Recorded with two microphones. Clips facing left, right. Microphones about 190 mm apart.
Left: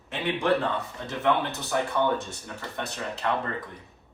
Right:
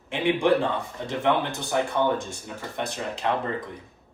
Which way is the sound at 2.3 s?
15° right (ahead or behind).